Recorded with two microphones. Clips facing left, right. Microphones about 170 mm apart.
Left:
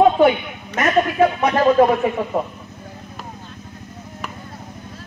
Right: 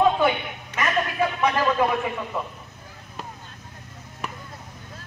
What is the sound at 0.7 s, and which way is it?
Music, 45° left (ahead or behind).